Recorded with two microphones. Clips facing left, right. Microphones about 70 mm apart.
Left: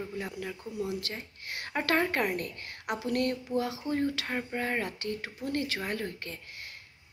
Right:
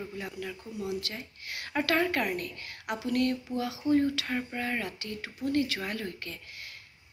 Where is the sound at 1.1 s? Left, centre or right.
Left.